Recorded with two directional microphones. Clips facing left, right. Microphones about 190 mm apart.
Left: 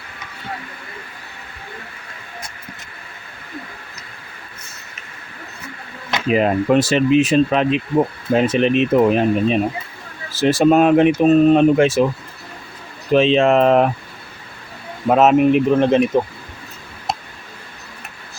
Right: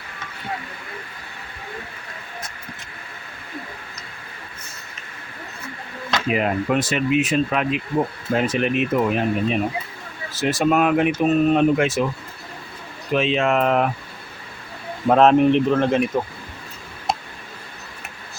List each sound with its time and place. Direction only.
6.1 s speech: 25° left (ahead or behind)
13.1 s speech: 30° left (ahead or behind)
15.0 s speech: 5° left (ahead or behind)